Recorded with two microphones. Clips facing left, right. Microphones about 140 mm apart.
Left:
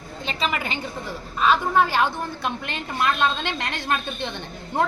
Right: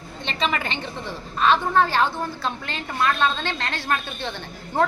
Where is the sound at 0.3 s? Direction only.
5° left (ahead or behind).